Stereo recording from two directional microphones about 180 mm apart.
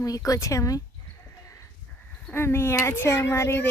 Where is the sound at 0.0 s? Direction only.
20° left (ahead or behind).